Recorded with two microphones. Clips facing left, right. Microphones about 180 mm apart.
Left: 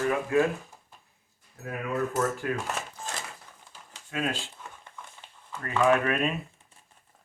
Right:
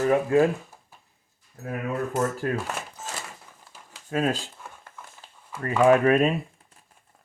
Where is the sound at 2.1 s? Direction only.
35° right (ahead or behind).